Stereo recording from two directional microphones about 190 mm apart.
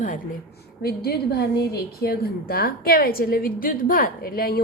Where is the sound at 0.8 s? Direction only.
55° left (ahead or behind).